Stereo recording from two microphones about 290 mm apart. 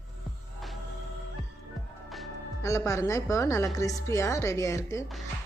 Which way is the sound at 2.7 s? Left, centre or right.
Centre.